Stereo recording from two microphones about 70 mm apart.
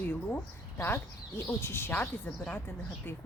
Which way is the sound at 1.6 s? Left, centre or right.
Left.